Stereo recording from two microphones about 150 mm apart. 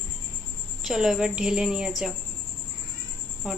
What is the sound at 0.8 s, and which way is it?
A woman's voice, 5° right (ahead or behind).